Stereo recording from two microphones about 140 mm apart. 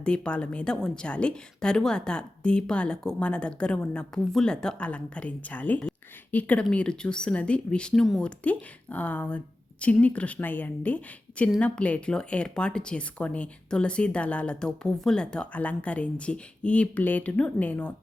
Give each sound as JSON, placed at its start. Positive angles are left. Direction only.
{"t": 0.0, "sound": "speech", "side_deg": 10}